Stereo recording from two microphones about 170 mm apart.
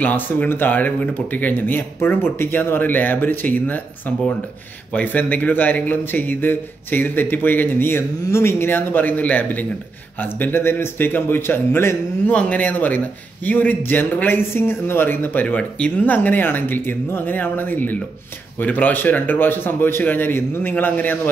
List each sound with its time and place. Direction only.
0.0 s a man's voice: 10° left (ahead or behind)